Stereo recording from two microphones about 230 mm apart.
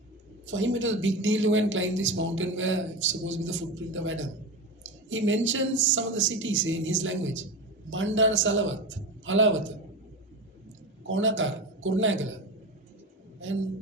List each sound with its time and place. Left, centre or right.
0.4 s a man's voice: right
11.0 s a man's voice: right
13.4 s a man's voice: right